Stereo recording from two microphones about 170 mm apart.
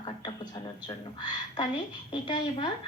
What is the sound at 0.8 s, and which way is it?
A woman's voice, 25° left (ahead or behind).